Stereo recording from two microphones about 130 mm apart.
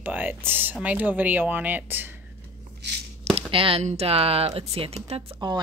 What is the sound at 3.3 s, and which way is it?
Speech, 45° right (ahead or behind).